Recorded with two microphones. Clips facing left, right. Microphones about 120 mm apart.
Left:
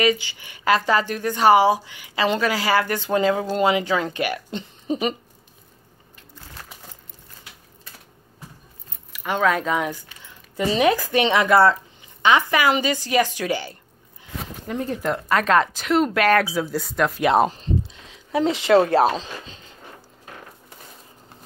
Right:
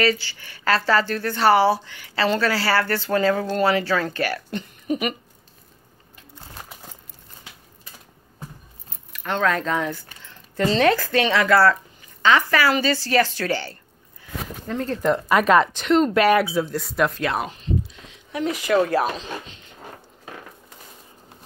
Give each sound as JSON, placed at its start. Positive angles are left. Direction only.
{"t": 0.0, "sound": "speech", "side_deg": 15}
{"t": 9.1, "sound": "speech", "side_deg": 10}
{"t": 15.0, "sound": "speech", "side_deg": 0}
{"t": 16.2, "sound": "speech", "side_deg": -5}
{"t": 17.4, "sound": "speech", "side_deg": 35}